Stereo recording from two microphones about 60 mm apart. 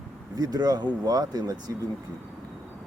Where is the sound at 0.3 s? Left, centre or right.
Right.